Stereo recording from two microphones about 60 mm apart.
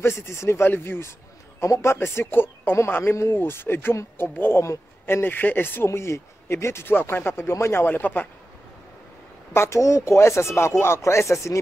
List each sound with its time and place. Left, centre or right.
0.0 s speech: left
0.7 s speech: left
1.6 s speech: left
2.1 s speech: left
4.6 s speech: left
5.9 s speech: left
7.8 s speech: left
9.5 s speech: left